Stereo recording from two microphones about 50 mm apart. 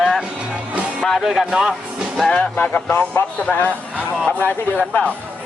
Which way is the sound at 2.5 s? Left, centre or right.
Left.